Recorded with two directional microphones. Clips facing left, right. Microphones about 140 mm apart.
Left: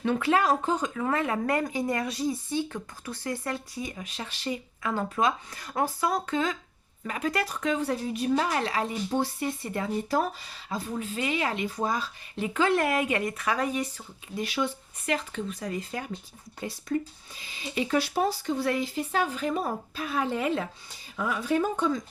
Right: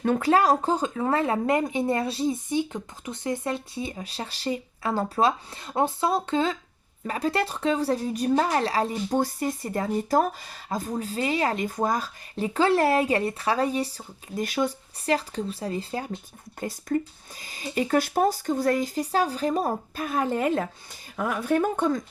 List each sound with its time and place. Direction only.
0.0 s speech: 40° right (ahead or behind)
16.6 s speech: 45° right (ahead or behind)